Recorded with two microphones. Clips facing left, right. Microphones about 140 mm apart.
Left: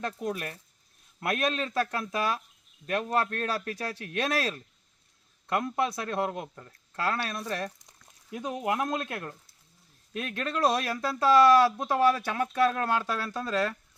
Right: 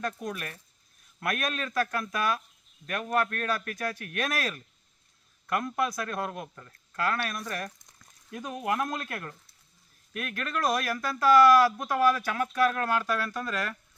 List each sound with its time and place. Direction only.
0.0 s speech: 30° left (ahead or behind)